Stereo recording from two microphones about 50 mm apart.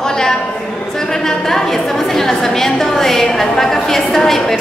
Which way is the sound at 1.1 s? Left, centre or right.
Centre.